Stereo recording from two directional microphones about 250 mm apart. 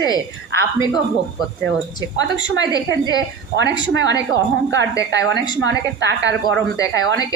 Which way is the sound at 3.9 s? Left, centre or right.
Right.